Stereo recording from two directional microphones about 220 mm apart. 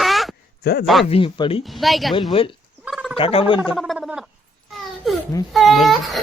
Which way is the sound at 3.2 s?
25° left (ahead or behind).